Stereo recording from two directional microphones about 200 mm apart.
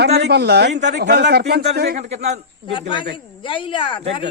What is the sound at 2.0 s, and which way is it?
Speech, 35° right (ahead or behind).